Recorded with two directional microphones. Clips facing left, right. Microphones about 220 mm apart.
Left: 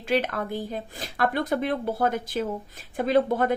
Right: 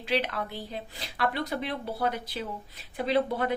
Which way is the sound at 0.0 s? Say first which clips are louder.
Left 4 dB; 50° left (ahead or behind).